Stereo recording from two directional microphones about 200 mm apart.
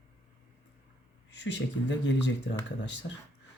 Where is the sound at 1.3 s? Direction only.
60° left (ahead or behind).